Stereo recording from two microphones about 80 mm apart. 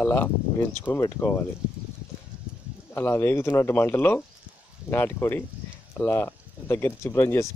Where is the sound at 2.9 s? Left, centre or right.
Left.